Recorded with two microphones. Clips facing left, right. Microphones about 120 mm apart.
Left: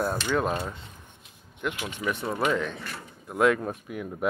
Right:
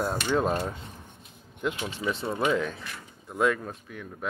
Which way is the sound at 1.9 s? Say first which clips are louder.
Even; 25° right (ahead or behind).